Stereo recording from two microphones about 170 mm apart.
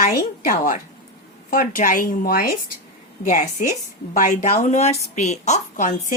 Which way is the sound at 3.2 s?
45° left (ahead or behind).